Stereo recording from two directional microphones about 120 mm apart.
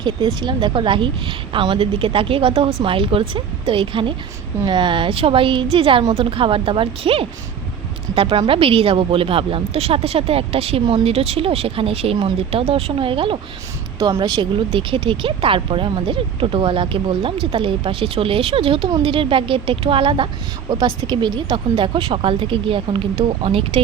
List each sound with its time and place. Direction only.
0.0 s a woman's voice: 40° right (ahead or behind)